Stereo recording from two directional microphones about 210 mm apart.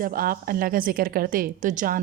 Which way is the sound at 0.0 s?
45° right (ahead or behind).